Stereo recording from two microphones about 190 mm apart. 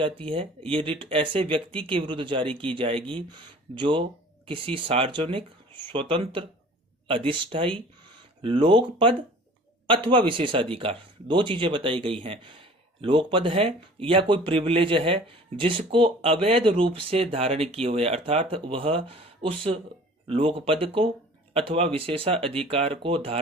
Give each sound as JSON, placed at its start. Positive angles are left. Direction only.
{"t": 0.0, "sound": "speech", "side_deg": -25}